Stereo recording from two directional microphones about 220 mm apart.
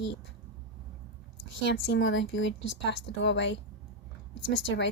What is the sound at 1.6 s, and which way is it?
A woman's voice, 55° left (ahead or behind).